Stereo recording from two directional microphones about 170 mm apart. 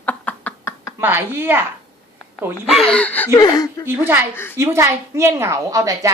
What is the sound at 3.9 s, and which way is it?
A woman's voice, 15° right (ahead or behind).